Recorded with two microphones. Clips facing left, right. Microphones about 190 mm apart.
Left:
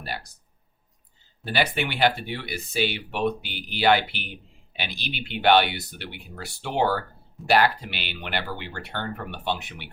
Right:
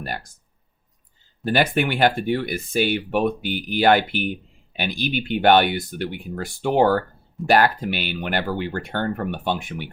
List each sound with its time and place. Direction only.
0.0 s speech: 50° right (ahead or behind)
1.5 s speech: 50° right (ahead or behind)